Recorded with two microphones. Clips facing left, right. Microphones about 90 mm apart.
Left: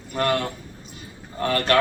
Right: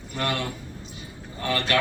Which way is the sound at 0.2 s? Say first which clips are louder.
Left 5 dB; 45° left (ahead or behind).